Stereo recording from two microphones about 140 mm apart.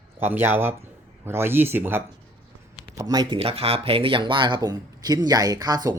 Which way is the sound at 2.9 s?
25° right (ahead or behind).